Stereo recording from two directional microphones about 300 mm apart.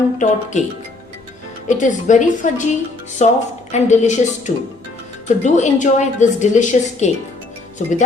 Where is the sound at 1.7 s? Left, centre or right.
Left.